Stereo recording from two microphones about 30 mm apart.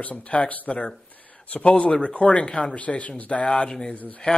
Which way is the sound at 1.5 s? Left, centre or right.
Left.